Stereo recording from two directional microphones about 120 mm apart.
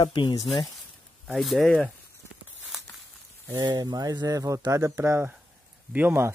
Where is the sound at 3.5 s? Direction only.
35° right (ahead or behind).